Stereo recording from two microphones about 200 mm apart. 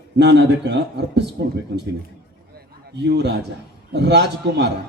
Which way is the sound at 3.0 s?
60° right (ahead or behind).